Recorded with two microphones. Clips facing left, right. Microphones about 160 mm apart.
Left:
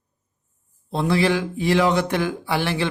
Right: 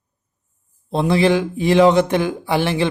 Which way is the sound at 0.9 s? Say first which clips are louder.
Right 4 dB; 20° right (ahead or behind).